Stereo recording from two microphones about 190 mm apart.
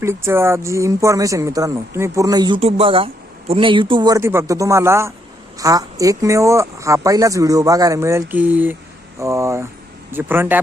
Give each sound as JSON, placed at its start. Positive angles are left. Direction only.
{"t": 0.0, "sound": "speech", "side_deg": -15}